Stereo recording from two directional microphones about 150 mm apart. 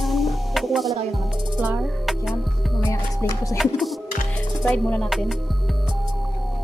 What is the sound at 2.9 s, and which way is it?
Music, 20° left (ahead or behind).